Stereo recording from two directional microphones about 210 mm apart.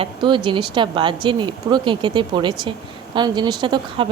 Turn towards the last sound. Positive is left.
turn(degrees=-20)  # may be behind; listen again after turning